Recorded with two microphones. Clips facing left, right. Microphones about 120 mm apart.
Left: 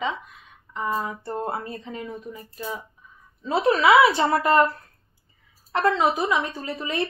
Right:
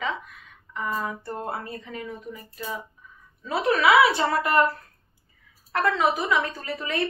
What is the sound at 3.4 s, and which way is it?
A woman's voice, 25° left (ahead or behind).